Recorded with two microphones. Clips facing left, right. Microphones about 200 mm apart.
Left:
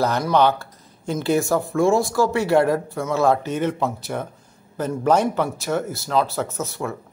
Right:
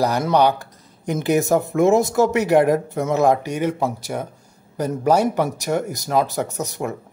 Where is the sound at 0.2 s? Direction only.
15° right (ahead or behind).